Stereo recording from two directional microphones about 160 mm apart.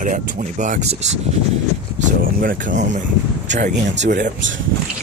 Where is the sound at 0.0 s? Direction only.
50° right (ahead or behind).